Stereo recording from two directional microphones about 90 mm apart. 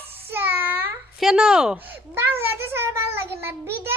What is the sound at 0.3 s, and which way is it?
Child singing, 20° right (ahead or behind).